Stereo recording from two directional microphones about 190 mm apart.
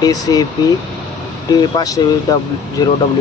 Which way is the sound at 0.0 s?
20° left (ahead or behind).